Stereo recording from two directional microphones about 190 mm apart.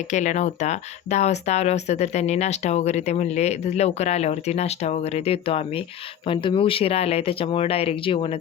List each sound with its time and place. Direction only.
0.1 s speech: 40° left (ahead or behind)